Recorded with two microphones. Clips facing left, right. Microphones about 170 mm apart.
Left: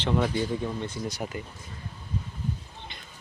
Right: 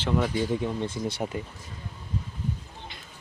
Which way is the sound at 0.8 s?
25° right (ahead or behind).